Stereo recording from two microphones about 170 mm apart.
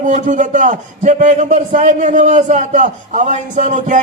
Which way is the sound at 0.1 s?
45° right (ahead or behind).